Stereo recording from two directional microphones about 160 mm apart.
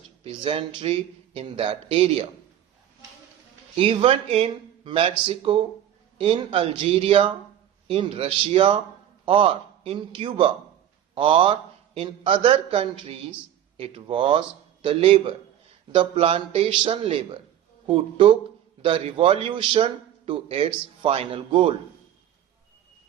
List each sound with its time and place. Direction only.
0.3 s a man's voice: 30° right (ahead or behind)
3.8 s a man's voice: 35° right (ahead or behind)